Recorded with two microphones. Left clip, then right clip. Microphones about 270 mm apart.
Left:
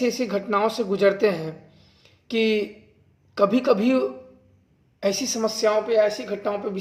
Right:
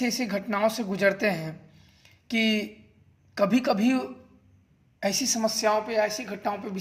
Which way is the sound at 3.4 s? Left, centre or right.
Right.